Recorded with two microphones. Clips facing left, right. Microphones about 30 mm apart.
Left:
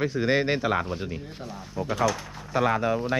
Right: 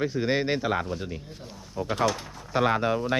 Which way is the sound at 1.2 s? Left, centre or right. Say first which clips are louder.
Left 5 dB; left.